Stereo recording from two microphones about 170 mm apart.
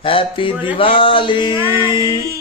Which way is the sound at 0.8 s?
30° left (ahead or behind).